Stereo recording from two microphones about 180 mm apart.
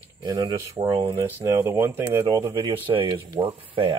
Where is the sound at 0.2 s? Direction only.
20° right (ahead or behind).